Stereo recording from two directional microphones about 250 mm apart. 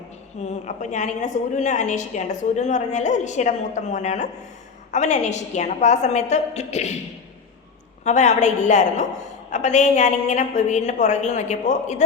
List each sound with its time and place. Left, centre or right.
0.4 s a woman's voice: left
8.0 s a woman's voice: left